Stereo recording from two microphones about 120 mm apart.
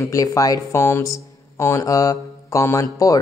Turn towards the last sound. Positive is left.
turn(degrees=25)  # may be behind; listen again after turning